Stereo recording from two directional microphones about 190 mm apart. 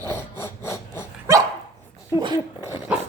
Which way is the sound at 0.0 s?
15° left (ahead or behind).